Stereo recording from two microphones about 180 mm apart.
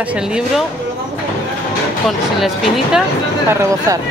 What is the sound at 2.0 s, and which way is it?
Speech, centre (ahead or behind).